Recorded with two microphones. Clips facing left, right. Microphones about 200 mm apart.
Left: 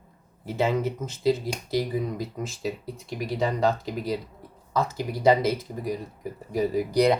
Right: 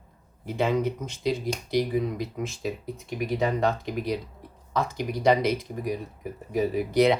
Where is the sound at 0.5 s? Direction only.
5° left (ahead or behind).